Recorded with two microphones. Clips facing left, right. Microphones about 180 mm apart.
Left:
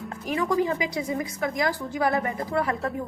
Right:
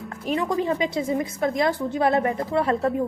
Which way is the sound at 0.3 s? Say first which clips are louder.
Right 1 dB; 25° right (ahead or behind).